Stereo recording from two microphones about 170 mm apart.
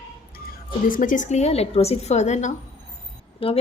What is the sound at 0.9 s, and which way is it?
A woman's voice, 50° left (ahead or behind).